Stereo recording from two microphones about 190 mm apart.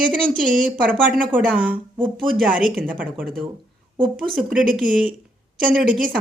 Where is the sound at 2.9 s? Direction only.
45° right (ahead or behind).